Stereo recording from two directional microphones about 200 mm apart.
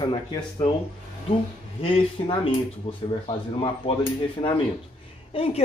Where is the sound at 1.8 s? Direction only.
25° left (ahead or behind).